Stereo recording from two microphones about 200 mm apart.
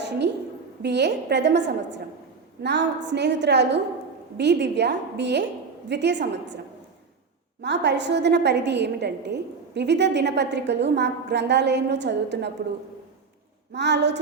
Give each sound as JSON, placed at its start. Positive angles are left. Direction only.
{"t": 0.8, "sound": "a woman's voice", "side_deg": -60}
{"t": 7.6, "sound": "a woman's voice", "side_deg": -60}
{"t": 13.7, "sound": "a woman's voice", "side_deg": -60}